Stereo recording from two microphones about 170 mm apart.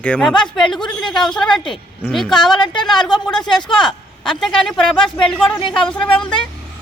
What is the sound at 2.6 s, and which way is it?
Speech, 25° left (ahead or behind).